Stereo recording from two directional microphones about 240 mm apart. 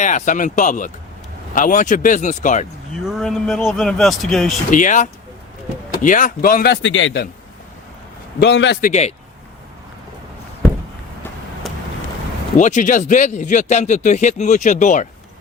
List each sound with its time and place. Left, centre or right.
0.0 s speech: left
3.1 s speech: centre
4.7 s speech: left
8.4 s a man's voice: left
8.9 s speech: left
11.6 s vehicle: centre
12.5 s speech: left